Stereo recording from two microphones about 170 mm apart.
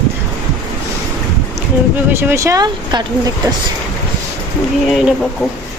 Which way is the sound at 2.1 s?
15° right (ahead or behind).